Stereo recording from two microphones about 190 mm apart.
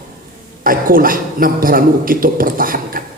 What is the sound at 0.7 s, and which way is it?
A man's voice, 45° right (ahead or behind).